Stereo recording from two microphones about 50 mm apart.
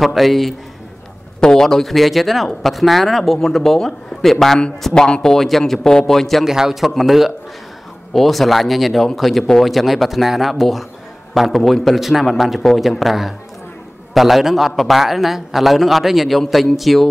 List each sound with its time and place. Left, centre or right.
0.0 s speech: centre
1.4 s a man's voice: centre
6.4 s a man's voice: centre